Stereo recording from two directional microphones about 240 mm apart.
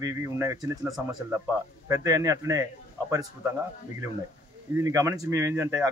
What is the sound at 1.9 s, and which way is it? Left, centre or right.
A man's voice, centre.